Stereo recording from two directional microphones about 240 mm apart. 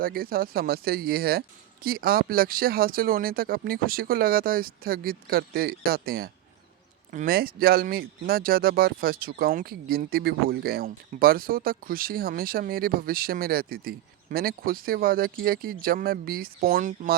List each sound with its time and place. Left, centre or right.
0.0 s speech: right